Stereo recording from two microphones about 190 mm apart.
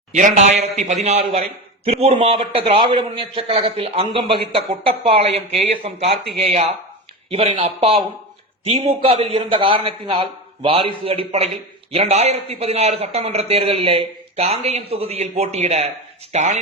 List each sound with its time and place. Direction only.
0.1 s a man's voice: 40° right (ahead or behind)